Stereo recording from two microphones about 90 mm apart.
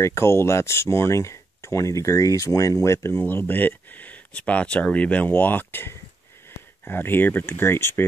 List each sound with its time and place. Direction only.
0.0 s speech: 30° left (ahead or behind)